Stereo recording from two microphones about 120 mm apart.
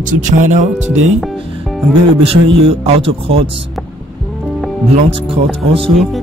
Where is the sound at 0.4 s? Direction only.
75° right (ahead or behind).